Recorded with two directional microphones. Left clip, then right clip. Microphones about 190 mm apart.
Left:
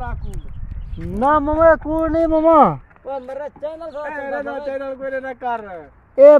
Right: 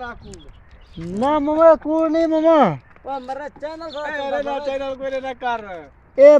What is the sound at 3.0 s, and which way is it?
Speech, 55° right (ahead or behind).